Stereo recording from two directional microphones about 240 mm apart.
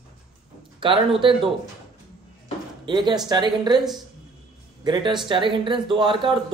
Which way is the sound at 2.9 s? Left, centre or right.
Centre.